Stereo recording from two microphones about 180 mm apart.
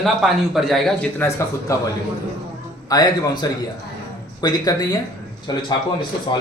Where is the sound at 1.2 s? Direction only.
15° left (ahead or behind).